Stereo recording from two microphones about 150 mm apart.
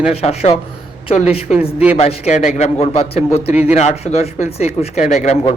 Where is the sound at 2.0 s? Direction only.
45° left (ahead or behind).